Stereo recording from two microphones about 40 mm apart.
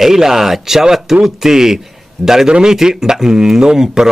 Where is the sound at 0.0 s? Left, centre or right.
Centre.